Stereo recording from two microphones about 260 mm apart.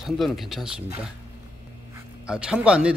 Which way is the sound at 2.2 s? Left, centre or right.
Centre.